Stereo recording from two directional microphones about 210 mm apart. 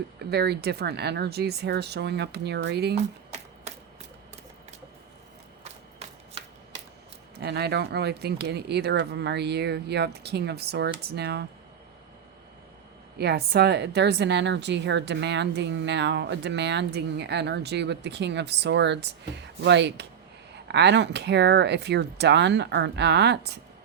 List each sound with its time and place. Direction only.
0.2 s speech: 50° right (ahead or behind)
7.3 s speech: 50° right (ahead or behind)
13.1 s a woman's voice: 50° right (ahead or behind)